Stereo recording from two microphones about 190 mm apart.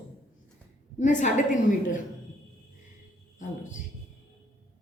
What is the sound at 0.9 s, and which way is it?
Speech, 40° left (ahead or behind).